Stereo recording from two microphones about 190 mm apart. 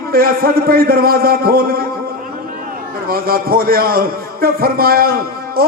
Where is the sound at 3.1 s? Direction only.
50° right (ahead or behind).